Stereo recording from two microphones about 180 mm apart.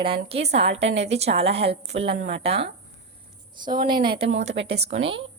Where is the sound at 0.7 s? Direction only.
80° right.